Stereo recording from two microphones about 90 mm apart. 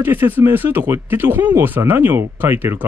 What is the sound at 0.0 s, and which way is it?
Speech, 25° right (ahead or behind).